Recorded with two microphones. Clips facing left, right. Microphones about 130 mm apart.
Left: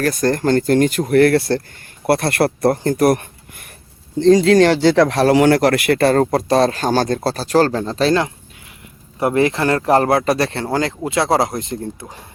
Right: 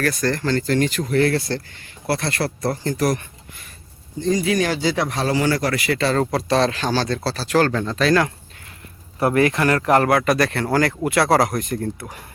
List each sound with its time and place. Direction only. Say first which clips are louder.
0.0 s speech: left 5 dB; 45° left (ahead or behind)
4.2 s speech: left 9 dB; 75° left (ahead or behind); by 12.2 s 25° left (ahead or behind)